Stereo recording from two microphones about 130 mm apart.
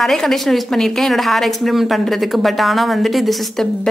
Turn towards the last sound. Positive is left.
turn(degrees=0)  # may be behind; listen again after turning